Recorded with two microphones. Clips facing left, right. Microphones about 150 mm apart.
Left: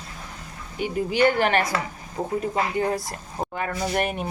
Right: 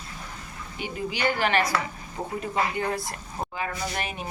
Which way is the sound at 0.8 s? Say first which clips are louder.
Left 8 dB; 50° left (ahead or behind).